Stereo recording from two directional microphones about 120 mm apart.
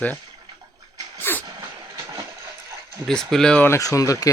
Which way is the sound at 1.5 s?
30° right (ahead or behind).